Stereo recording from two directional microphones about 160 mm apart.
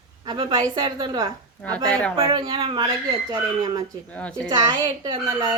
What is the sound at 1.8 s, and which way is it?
Speech, 5° left (ahead or behind).